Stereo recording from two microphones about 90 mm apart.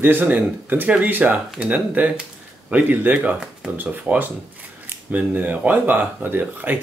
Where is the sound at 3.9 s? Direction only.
20° right (ahead or behind).